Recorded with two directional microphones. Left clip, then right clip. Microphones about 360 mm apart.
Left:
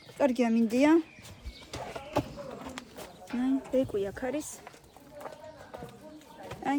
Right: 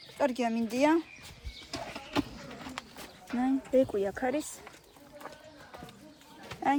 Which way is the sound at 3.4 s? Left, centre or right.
Centre.